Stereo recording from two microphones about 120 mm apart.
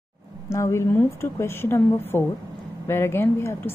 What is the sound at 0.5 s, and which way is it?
A woman's voice, 25° left (ahead or behind).